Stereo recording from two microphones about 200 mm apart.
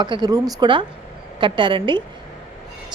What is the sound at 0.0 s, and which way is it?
A woman's voice, 20° right (ahead or behind).